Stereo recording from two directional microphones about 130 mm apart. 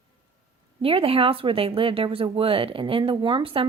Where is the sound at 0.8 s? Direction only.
45° right (ahead or behind).